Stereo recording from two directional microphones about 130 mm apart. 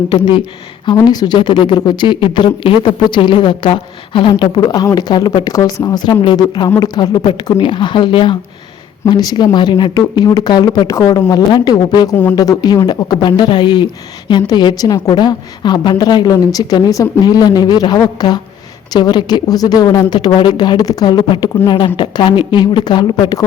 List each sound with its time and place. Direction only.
0.9 s a woman's voice: 30° left (ahead or behind)